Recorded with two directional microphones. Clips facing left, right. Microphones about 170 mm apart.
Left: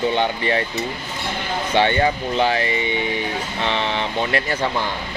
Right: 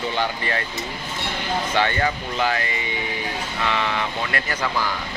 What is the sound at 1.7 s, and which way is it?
Speech, 25° left (ahead or behind).